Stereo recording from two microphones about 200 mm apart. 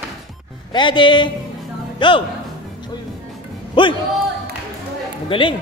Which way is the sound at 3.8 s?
25° left (ahead or behind).